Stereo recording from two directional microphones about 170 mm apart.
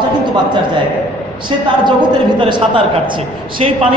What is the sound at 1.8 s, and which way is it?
A woman's voice, 30° right (ahead or behind).